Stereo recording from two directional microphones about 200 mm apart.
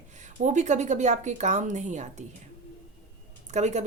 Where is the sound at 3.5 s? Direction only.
35° right (ahead or behind).